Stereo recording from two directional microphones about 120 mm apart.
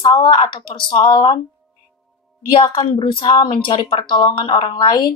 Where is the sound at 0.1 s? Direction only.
35° left (ahead or behind).